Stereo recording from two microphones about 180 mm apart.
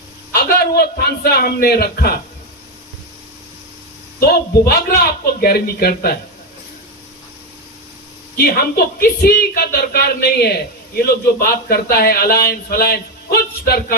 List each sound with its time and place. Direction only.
0.3 s speech: 60° left (ahead or behind)
4.2 s speech: 60° left (ahead or behind)
8.4 s speech: 55° left (ahead or behind)